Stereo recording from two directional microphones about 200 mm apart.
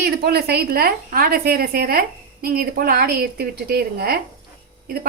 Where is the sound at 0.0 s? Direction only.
50° right (ahead or behind).